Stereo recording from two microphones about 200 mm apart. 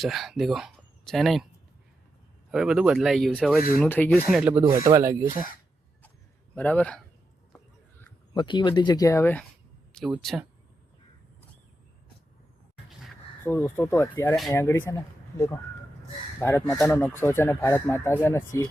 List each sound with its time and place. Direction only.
0.0 s speech: centre (ahead or behind)
2.5 s speech: 5° right (ahead or behind)
6.6 s speech: 10° left (ahead or behind)
8.3 s speech: 20° left (ahead or behind); by 10.4 s centre (ahead or behind)
13.4 s speech: 10° left (ahead or behind)
16.4 s speech: 15° left (ahead or behind)